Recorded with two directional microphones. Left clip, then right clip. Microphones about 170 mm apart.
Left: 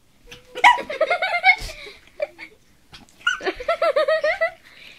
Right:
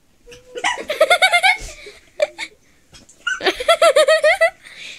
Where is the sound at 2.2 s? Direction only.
35° right (ahead or behind).